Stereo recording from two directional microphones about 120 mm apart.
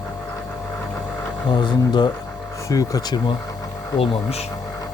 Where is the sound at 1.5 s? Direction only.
40° left (ahead or behind).